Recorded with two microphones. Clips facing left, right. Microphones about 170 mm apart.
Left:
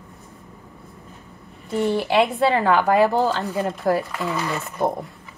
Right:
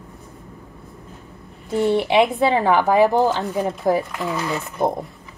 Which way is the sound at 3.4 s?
Centre (ahead or behind).